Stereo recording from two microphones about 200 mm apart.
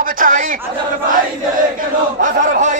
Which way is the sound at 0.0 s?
40° right (ahead or behind).